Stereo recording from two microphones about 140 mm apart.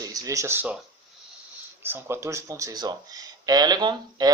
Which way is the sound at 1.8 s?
15° right (ahead or behind).